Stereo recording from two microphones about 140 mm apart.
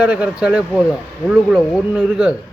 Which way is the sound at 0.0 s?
10° right (ahead or behind).